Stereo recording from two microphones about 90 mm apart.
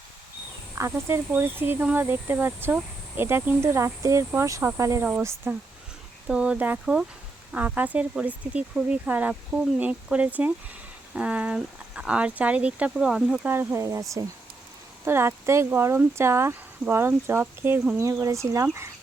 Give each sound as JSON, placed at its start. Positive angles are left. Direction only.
{"t": 0.8, "sound": "speech", "side_deg": -30}
{"t": 6.2, "sound": "speech", "side_deg": -10}
{"t": 13.5, "sound": "speech", "side_deg": -25}